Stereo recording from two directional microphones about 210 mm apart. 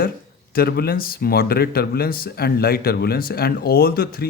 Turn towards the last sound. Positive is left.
turn(degrees=45)  # may be behind; listen again after turning